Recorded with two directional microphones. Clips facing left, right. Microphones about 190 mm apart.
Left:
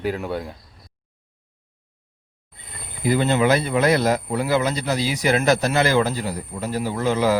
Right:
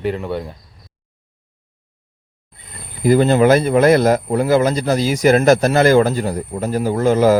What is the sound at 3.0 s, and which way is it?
Speech, 45° right (ahead or behind).